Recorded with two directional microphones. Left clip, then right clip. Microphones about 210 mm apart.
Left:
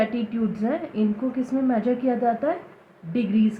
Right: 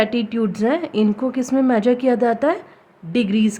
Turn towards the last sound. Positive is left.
turn(degrees=-65)  # may be behind; listen again after turning